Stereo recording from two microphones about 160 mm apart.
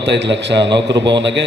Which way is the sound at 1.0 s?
90° right.